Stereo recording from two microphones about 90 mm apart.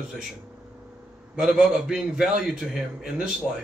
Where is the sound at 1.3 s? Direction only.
5° right (ahead or behind).